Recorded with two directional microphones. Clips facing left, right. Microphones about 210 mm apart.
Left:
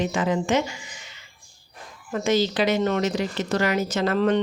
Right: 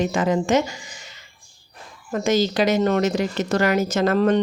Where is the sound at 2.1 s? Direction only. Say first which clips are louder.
Right 2 dB; 45° right (ahead or behind).